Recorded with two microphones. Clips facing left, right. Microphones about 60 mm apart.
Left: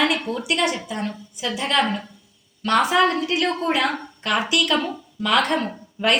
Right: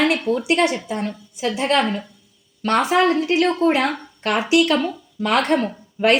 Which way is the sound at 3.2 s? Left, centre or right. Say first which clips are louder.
Right 5 dB; right.